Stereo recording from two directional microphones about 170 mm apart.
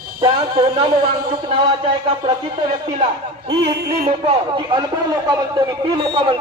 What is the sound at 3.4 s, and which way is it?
A man's voice, 35° right (ahead or behind).